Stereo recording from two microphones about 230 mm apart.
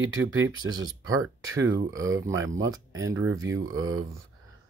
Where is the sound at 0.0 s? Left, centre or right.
Right.